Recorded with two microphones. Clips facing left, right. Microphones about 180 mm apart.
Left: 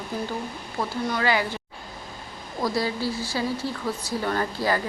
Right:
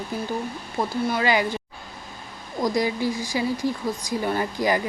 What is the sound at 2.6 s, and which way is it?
Speech, 15° right (ahead or behind).